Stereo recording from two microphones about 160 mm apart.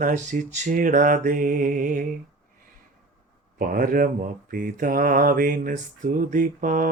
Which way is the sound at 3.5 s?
60° right (ahead or behind).